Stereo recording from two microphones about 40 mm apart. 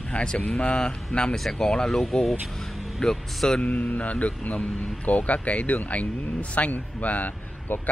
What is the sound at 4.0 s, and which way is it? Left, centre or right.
A man's voice, left.